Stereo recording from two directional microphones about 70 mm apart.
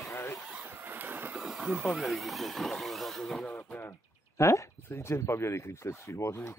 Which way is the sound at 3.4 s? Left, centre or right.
Left.